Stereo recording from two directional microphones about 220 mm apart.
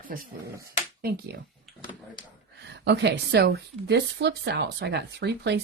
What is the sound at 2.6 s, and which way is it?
A woman's voice, 50° right (ahead or behind).